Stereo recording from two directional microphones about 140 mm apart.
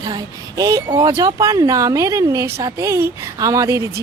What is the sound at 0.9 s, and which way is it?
A woman's voice, 25° right (ahead or behind).